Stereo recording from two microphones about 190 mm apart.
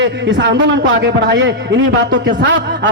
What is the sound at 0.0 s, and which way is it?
A man's voice, 65° right (ahead or behind).